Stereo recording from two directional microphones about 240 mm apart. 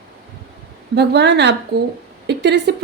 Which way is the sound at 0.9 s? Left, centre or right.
Right.